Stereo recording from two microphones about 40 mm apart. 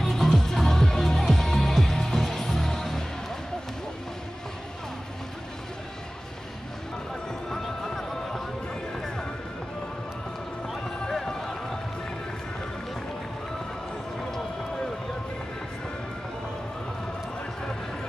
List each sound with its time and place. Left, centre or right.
0.0 s music: centre
7.4 s a sound: centre
10.8 s run: centre